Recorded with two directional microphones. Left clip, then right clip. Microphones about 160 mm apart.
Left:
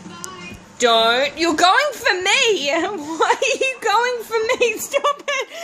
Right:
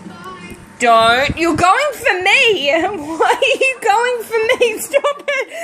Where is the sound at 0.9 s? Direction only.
20° left (ahead or behind).